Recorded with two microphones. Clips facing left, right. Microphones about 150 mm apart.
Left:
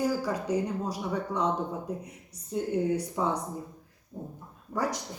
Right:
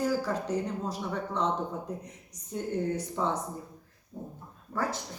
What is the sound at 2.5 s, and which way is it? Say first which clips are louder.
Speech: left 3 dB; 10° left (ahead or behind).